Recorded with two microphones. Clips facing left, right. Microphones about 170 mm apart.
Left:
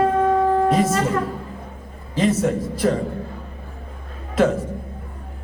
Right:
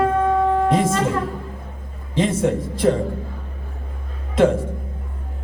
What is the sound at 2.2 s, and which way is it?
Speech, 25° right (ahead or behind).